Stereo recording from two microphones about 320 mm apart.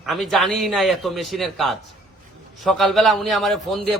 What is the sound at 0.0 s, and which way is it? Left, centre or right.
A man's voice, centre.